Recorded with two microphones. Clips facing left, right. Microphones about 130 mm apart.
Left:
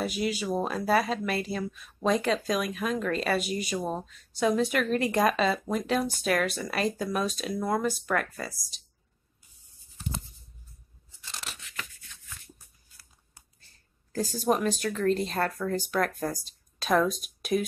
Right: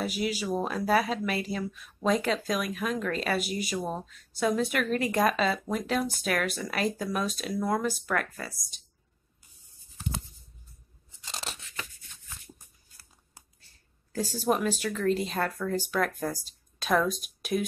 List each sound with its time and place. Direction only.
0.0 s speech: 5° right (ahead or behind)
11.1 s scissors: 20° right (ahead or behind)
14.1 s speech: 5° right (ahead or behind)